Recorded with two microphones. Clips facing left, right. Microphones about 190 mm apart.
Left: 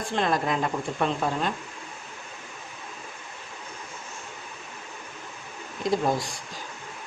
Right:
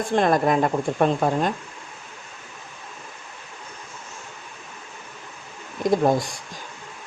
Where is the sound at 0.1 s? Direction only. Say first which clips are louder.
Right 6 dB; 50° right (ahead or behind).